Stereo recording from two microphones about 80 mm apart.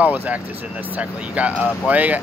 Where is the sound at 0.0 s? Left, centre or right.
Centre.